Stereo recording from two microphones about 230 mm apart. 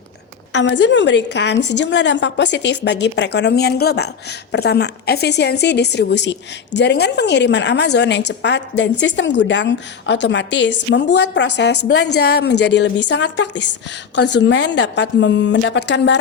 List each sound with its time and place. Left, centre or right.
0.5 s a woman's voice: left